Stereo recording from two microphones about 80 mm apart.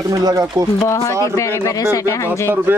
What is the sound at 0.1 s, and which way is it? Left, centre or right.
Speech, right.